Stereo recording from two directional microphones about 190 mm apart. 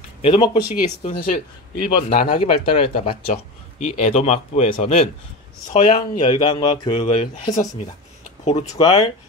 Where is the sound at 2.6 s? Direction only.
30° left (ahead or behind).